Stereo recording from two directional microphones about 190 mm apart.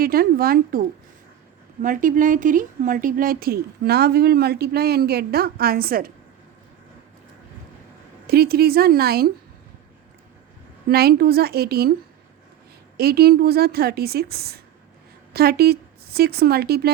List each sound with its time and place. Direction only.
0.0 s speech: 50° right (ahead or behind)
8.3 s speech: 55° right (ahead or behind)
10.8 s a woman's voice: 55° right (ahead or behind)
13.0 s a woman's voice: 55° right (ahead or behind)